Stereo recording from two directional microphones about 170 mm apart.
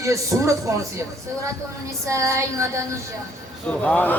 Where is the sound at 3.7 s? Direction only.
5° left (ahead or behind).